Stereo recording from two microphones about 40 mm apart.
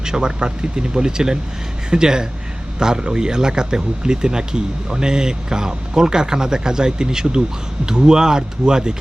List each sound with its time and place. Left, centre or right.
0.0 s speech: centre